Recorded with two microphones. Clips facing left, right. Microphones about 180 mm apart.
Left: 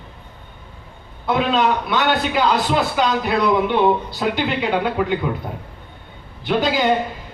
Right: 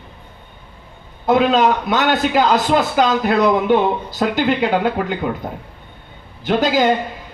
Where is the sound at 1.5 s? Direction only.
45° right (ahead or behind).